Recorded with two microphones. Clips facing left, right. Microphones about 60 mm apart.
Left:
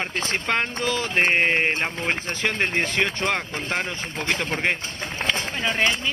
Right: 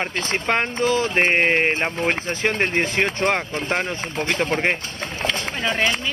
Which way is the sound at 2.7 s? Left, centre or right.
Right.